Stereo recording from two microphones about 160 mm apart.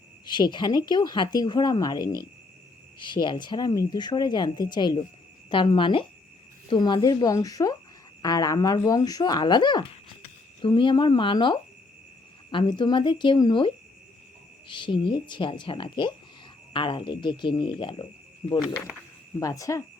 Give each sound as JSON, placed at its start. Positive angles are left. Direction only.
{"t": 0.3, "sound": "speech", "side_deg": 30}
{"t": 19.4, "sound": "speech", "side_deg": 20}